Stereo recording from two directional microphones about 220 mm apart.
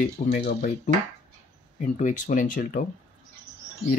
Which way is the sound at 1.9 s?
35° left (ahead or behind).